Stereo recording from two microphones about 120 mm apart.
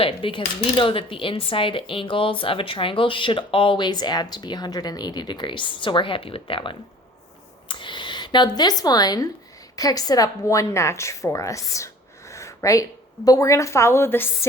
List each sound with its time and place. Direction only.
0.0 s a woman's voice: 45° left (ahead or behind); by 11.9 s 25° left (ahead or behind)
12.3 s a sound: 25° left (ahead or behind)
13.2 s a woman's voice: 30° left (ahead or behind)